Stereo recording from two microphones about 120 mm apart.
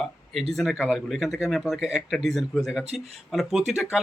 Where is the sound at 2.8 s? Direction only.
65° right (ahead or behind).